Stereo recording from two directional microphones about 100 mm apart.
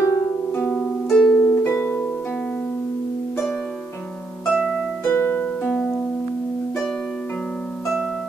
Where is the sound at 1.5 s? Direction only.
20° left (ahead or behind).